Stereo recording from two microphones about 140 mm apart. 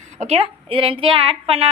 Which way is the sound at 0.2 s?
50° right (ahead or behind).